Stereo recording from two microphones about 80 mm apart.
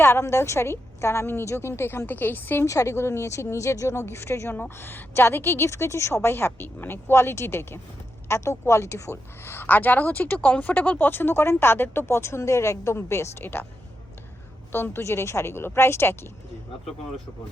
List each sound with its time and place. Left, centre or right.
0.0 s a woman's voice: left
2.6 s a woman's voice: left
14.7 s a woman's voice: left